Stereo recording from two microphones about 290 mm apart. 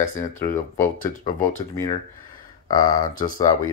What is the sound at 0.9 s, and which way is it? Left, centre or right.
Speech, left.